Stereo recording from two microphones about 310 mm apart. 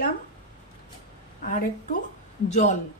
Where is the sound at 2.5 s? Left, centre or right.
Left.